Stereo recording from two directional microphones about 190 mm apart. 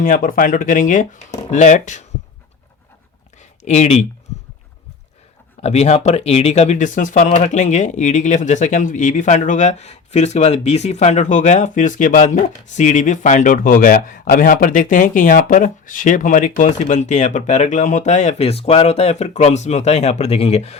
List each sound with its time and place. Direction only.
0.0 s speech: 45° left (ahead or behind)
3.6 s speech: 35° left (ahead or behind)
5.6 s speech: 35° left (ahead or behind)